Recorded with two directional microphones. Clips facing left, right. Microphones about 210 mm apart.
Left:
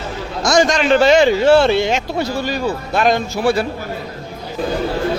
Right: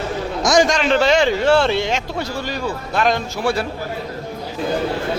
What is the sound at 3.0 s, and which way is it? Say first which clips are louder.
Speech: left 3 dB; 10° left (ahead or behind).